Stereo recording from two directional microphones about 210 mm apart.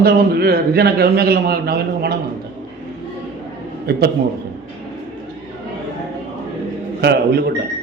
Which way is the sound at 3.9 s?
45° right (ahead or behind).